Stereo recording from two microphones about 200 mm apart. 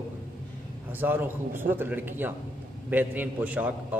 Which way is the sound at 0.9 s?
10° right (ahead or behind).